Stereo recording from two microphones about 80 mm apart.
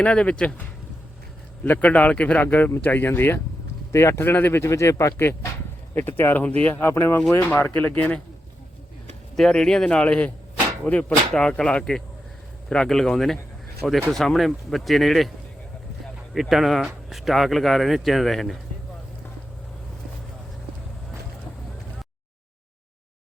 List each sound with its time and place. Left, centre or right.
0.0 s speech: centre; by 5.5 s left
5.9 s speech: left
6.8 s speech: left
9.3 s speech: centre
16.3 s speech: centre